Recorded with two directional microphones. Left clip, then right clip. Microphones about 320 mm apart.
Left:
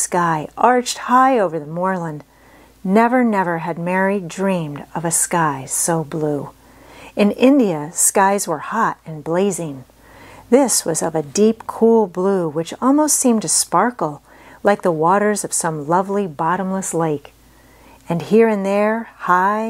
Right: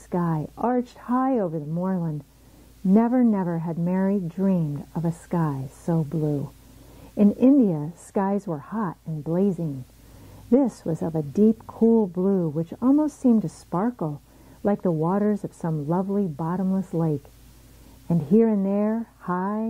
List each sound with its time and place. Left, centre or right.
0.1 s speech: centre